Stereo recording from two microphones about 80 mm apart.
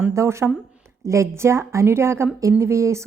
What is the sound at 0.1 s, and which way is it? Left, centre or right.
A woman's voice, right.